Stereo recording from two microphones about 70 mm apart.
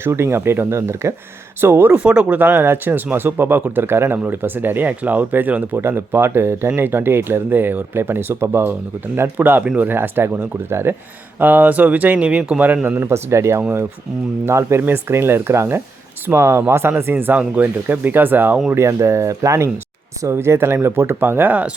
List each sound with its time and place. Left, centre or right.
0.0 s speech: right
2.0 s speech: centre; by 10.9 s right
11.3 s speech: right
18.7 s speech: right